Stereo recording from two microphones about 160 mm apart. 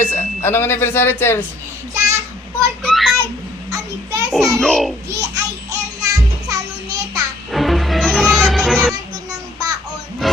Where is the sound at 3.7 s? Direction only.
20° right (ahead or behind).